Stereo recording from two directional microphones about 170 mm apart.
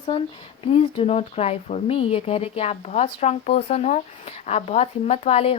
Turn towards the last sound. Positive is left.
turn(degrees=35)  # may be behind; listen again after turning